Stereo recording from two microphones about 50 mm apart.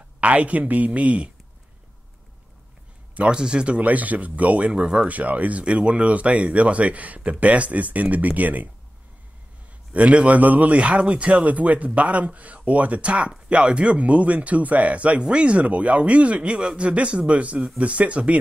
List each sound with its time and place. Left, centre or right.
0.2 s speech: right
3.2 s speech: centre; by 8.6 s right
9.9 s speech: right